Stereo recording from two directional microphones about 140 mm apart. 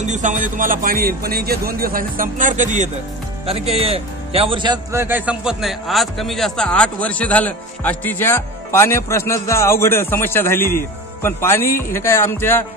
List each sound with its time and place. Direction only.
0.0 s speech: 60° right (ahead or behind)
0.6 s speech: 80° right; by 2.9 s 60° right (ahead or behind)
3.4 s speech: 45° right (ahead or behind)
4.9 s a man's voice: 15° right (ahead or behind); by 12.6 s 15° left (ahead or behind)